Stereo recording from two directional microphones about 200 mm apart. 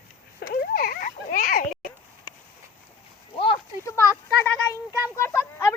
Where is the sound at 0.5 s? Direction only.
45° left (ahead or behind).